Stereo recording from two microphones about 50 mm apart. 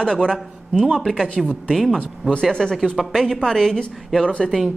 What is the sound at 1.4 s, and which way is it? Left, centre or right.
A man's voice, centre.